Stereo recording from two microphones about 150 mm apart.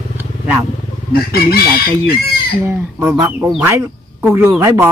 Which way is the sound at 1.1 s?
90° left.